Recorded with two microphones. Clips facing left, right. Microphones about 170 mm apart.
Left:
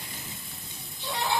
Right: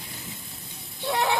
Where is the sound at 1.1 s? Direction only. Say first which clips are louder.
Right 6 dB; 65° right (ahead or behind).